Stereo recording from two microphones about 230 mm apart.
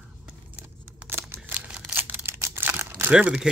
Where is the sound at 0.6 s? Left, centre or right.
Centre.